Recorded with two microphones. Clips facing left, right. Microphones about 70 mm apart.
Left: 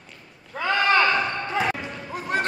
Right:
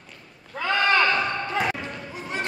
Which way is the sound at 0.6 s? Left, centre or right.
Centre.